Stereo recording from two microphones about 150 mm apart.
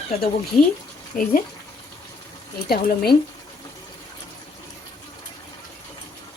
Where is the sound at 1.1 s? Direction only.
60° left (ahead or behind).